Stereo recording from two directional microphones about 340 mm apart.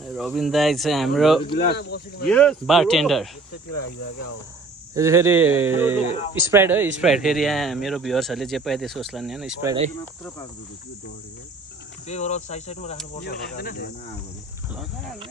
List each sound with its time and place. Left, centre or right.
0.0 s speech: centre
1.5 s speech: left
2.2 s speech: centre
4.9 s speech: centre
12.0 s speech: centre